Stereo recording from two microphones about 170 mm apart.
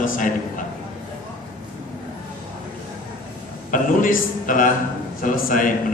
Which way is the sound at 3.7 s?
55° left (ahead or behind).